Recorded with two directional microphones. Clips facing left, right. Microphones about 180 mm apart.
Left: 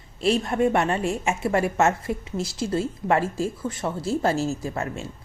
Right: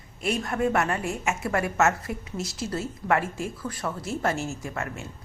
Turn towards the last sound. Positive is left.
turn(degrees=30)  # may be behind; listen again after turning